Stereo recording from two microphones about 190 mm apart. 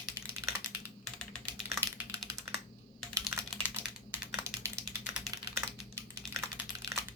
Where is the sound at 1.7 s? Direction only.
15° right (ahead or behind).